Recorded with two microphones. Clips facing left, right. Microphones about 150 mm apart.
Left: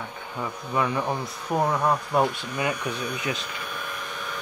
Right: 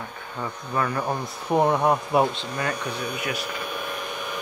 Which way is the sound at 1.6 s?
25° right (ahead or behind).